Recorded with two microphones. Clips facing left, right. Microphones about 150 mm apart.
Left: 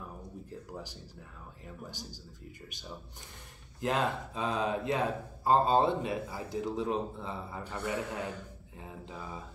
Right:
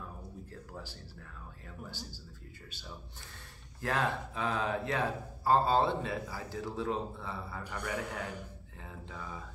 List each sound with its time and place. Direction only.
0.5 s speech: 15° left (ahead or behind)
3.8 s speech: 20° left (ahead or behind)